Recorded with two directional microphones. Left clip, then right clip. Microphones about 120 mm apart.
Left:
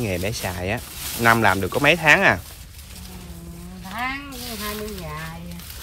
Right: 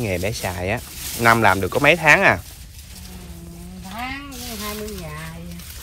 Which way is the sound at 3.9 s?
Centre (ahead or behind).